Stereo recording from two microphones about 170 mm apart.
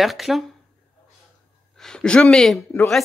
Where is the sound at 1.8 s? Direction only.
5° left (ahead or behind).